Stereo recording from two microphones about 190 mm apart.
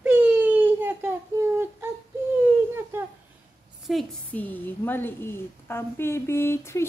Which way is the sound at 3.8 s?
Centre (ahead or behind).